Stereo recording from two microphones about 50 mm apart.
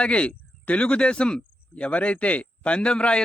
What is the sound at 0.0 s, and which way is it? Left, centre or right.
Speech, left.